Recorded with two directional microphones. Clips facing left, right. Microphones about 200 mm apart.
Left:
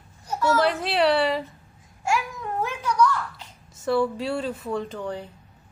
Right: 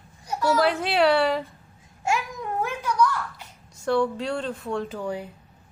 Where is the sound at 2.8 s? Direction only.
10° right (ahead or behind).